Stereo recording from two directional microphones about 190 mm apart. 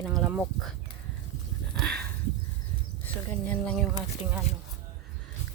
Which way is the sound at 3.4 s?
10° left (ahead or behind).